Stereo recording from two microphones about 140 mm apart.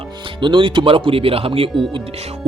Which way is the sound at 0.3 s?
35° right (ahead or behind).